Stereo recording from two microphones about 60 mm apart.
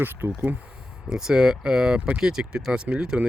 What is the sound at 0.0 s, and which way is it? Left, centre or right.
Speech, right.